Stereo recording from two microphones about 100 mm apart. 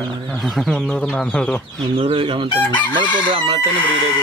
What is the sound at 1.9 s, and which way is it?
Speech, 60° right (ahead or behind).